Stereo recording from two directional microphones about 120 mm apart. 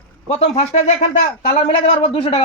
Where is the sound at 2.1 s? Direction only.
55° left (ahead or behind).